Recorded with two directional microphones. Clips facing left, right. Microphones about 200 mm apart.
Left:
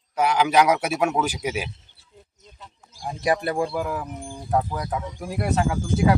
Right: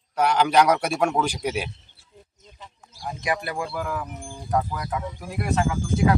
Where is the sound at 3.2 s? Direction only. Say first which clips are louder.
Left 5 dB; 35° left (ahead or behind).